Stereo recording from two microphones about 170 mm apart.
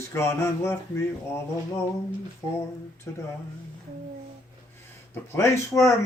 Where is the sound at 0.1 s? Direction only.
15° left (ahead or behind).